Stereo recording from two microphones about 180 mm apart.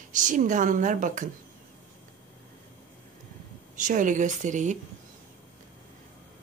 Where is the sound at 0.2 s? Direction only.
45° right (ahead or behind).